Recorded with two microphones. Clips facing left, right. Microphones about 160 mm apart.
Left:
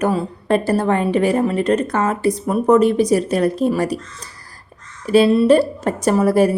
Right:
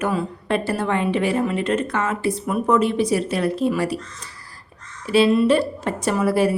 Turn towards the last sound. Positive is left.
turn(degrees=45)  # may be behind; listen again after turning